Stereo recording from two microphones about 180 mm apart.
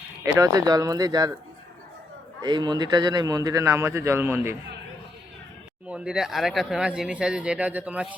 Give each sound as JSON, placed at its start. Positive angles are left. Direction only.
{"t": 0.3, "sound": "speech", "side_deg": -20}
{"t": 2.4, "sound": "a man's voice", "side_deg": -25}
{"t": 5.9, "sound": "speech", "side_deg": -5}